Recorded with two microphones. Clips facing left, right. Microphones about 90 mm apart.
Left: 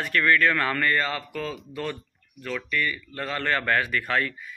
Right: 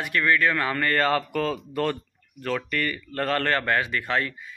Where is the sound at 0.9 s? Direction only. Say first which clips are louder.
Right 3 dB; 50° right (ahead or behind).